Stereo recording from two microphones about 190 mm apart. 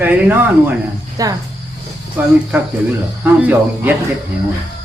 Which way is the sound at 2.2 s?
5° right (ahead or behind).